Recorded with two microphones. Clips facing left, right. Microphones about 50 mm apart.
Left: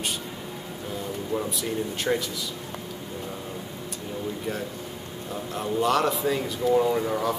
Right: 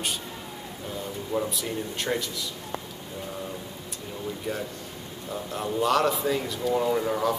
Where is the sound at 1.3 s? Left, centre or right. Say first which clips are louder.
Even; centre.